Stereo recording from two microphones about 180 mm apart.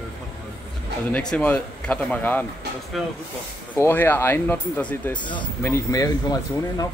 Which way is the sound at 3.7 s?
10° left (ahead or behind).